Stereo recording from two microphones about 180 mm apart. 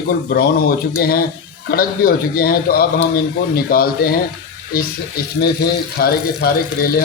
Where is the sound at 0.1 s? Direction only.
60° left (ahead or behind).